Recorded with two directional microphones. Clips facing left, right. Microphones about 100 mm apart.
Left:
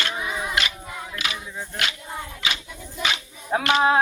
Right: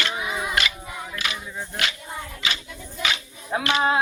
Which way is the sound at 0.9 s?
5° right (ahead or behind).